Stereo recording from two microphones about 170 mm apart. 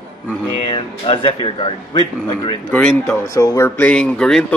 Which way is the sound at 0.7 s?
30° left (ahead or behind).